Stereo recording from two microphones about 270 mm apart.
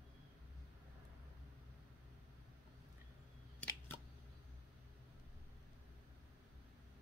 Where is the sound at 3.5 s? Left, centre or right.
Centre.